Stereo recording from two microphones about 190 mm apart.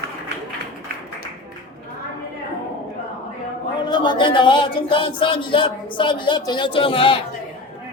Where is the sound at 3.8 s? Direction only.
25° left (ahead or behind).